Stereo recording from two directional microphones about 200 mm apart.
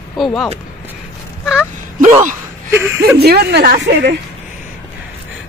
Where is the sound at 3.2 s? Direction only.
55° right (ahead or behind).